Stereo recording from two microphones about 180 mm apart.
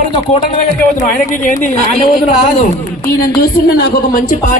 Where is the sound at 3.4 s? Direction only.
60° left (ahead or behind).